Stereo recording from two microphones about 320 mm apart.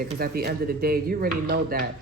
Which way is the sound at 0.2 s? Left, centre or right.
Right.